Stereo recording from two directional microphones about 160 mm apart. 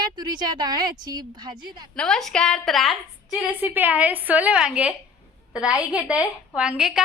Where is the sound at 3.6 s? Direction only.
10° right (ahead or behind).